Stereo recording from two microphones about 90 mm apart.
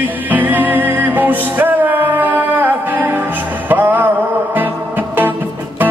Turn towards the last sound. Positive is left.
turn(degrees=-20)  # may be behind; listen again after turning